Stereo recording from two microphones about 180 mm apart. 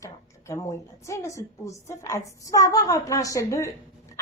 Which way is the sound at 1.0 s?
15° left (ahead or behind).